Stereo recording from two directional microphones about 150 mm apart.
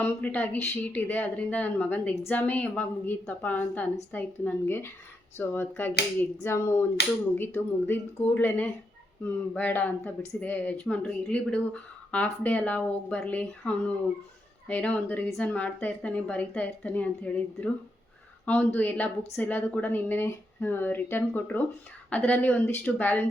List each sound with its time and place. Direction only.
0.0 s speech: 10° left (ahead or behind)